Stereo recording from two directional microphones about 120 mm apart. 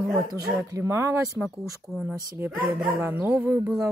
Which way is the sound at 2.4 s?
15° right (ahead or behind).